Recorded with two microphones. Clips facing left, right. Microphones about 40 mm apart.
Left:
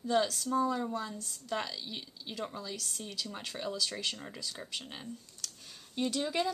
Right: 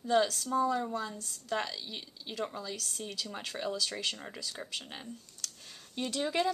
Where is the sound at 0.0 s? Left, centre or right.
Centre.